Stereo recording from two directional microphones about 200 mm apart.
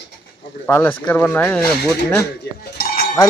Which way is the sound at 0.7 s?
10° left (ahead or behind).